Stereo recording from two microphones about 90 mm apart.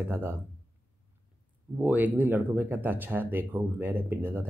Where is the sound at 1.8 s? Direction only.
20° right (ahead or behind).